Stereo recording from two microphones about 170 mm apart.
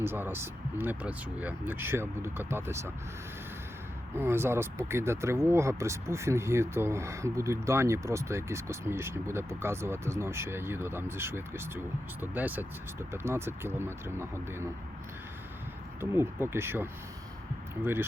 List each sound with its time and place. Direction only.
0.0 s speech: 15° right (ahead or behind)
4.1 s speech: 15° right (ahead or behind)
16.0 s speech: 15° right (ahead or behind)